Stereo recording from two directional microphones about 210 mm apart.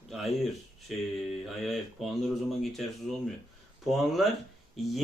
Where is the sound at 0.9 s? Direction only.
Centre (ahead or behind).